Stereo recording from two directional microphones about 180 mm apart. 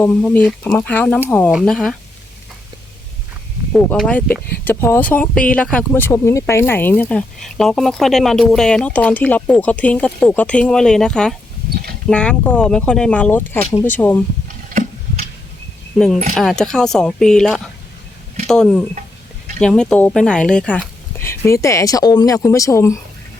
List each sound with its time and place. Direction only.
0.0 s speech: 10° left (ahead or behind)
3.7 s speech: 5° left (ahead or behind)
14.4 s a sound: 45° right (ahead or behind)
16.0 s speech: centre (ahead or behind)